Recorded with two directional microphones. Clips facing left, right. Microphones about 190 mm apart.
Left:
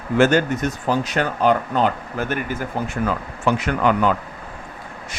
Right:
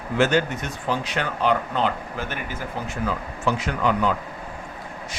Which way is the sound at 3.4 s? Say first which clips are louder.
Left 4 dB; 60° left (ahead or behind).